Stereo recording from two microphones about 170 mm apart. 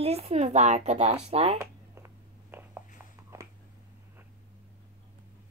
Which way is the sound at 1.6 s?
15° right (ahead or behind).